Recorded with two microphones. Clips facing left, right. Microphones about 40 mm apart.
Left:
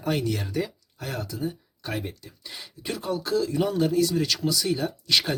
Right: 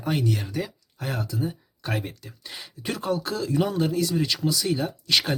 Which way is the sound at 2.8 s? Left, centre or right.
Right.